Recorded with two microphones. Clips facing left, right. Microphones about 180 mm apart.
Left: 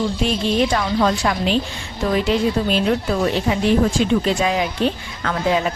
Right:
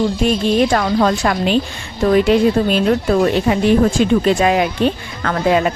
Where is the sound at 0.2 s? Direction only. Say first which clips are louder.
Right 3 dB; 50° right (ahead or behind).